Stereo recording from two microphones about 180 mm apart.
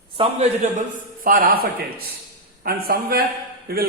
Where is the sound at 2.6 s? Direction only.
55° right (ahead or behind).